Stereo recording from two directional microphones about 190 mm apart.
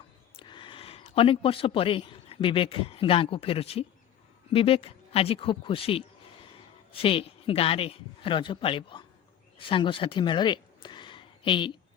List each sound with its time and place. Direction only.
0.3 s speech: 25° left (ahead or behind)